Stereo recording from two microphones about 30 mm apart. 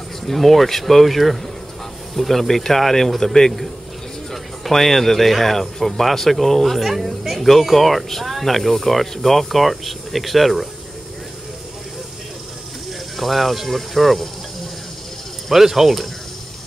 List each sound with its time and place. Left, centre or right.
0.3 s speech: centre
13.2 s speech: centre
15.5 s speech: centre